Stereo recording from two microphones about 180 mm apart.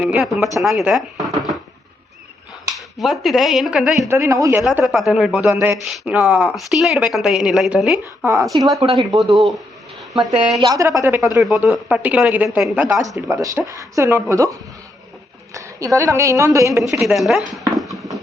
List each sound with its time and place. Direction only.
0.0 s a woman's voice: 5° right (ahead or behind)
2.7 s speech: centre (ahead or behind)
4.1 s a woman's voice: 15° right (ahead or behind)
4.6 s a woman's voice: 5° right (ahead or behind)
5.8 s speech: centre (ahead or behind)
7.9 s a woman's voice: 15° right (ahead or behind)
8.9 s speech: centre (ahead or behind)
10.6 s a woman's voice: 20° right (ahead or behind)
11.3 s a woman's voice: 5° right (ahead or behind)
15.5 s a woman's voice: 15° right (ahead or behind)
16.9 s speech: centre (ahead or behind)
17.7 s a sound: centre (ahead or behind)